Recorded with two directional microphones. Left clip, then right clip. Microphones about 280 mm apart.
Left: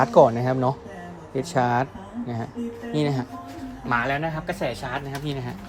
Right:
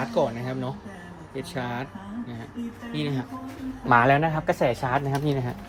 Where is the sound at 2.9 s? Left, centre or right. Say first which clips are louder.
Left 5 dB; left.